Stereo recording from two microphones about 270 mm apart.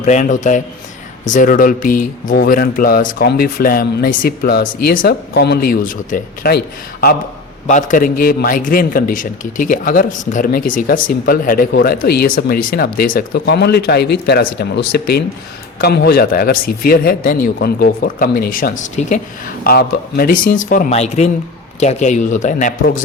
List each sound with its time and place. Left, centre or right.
0.0 s a man's voice: left